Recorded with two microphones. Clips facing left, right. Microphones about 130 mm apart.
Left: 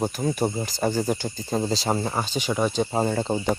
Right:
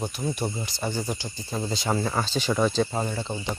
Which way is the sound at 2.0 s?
20° left (ahead or behind).